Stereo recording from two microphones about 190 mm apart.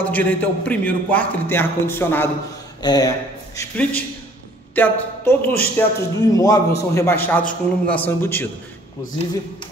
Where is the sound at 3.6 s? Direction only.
5° left (ahead or behind).